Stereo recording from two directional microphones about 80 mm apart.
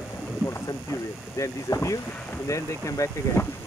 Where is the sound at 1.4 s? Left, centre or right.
Left.